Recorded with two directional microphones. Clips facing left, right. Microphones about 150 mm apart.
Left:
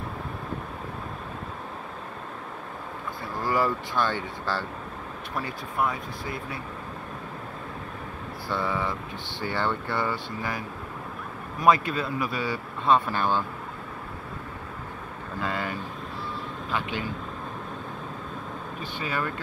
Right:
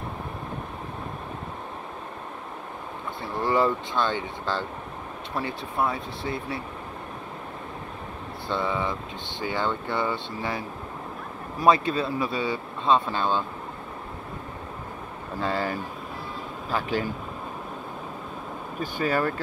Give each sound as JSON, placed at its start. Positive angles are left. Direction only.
{"t": 3.3, "sound": "speech", "side_deg": -25}
{"t": 8.5, "sound": "speech", "side_deg": -20}
{"t": 15.4, "sound": "speech", "side_deg": -30}
{"t": 18.8, "sound": "speech", "side_deg": -40}